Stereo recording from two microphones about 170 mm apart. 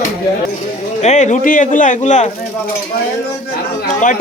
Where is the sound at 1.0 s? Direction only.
45° left (ahead or behind).